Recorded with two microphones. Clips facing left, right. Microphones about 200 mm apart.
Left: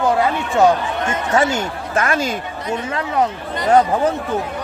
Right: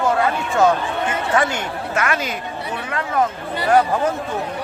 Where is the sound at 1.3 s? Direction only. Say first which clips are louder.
Left 4 dB; 25° left (ahead or behind).